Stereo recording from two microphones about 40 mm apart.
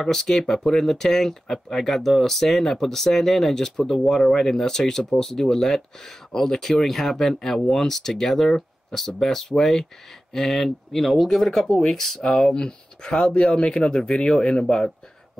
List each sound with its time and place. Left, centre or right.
0.0 s speech: centre